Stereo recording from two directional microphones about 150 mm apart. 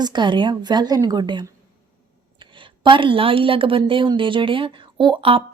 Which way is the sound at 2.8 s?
35° right (ahead or behind).